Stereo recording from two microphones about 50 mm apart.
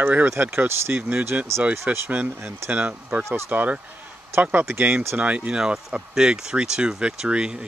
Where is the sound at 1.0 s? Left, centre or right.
Right.